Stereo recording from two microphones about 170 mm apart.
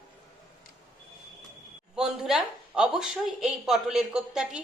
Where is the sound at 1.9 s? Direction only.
5° right (ahead or behind).